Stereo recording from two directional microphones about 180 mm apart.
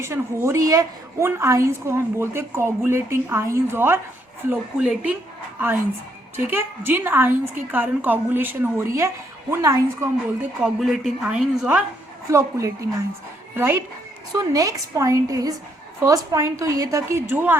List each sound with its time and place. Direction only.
0.0 s a woman's voice: 15° right (ahead or behind)
6.3 s a woman's voice: 10° right (ahead or behind)
10.6 s a woman's voice: centre (ahead or behind)
12.3 s a woman's voice: 15° right (ahead or behind)